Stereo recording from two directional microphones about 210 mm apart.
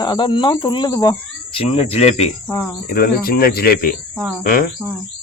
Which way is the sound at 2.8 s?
45° left (ahead or behind).